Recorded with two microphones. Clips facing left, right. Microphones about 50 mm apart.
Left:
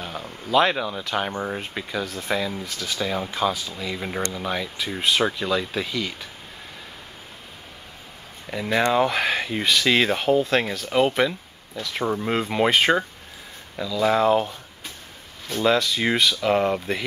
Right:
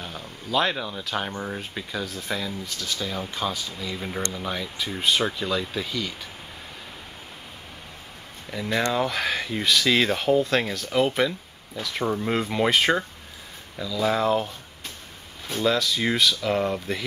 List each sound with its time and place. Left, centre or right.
0.0 s a sound: left
1.1 s speech: centre
3.8 s speech: centre
8.5 s speech: centre
15.6 s speech: left